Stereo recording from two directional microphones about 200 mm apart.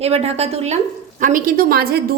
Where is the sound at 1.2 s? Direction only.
45° right (ahead or behind).